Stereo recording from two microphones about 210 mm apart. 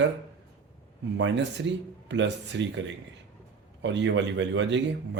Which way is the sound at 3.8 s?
60° right (ahead or behind).